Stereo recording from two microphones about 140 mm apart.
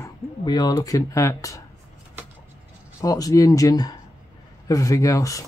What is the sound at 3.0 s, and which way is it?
Speech, 25° left (ahead or behind).